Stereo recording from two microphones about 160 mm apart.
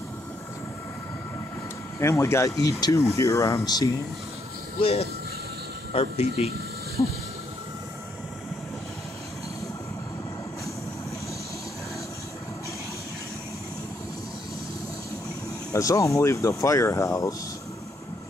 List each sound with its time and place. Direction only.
2.0 s speech: 15° left (ahead or behind)
4.7 s speech: 35° left (ahead or behind)
15.7 s speech: 20° left (ahead or behind)